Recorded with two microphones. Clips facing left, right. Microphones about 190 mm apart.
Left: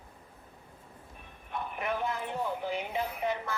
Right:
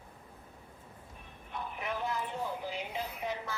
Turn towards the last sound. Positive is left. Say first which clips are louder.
# left 5 dB
turn(degrees=60)  # may be behind; listen again after turning